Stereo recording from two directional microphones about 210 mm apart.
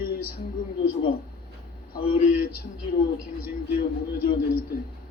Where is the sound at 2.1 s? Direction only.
45° left (ahead or behind).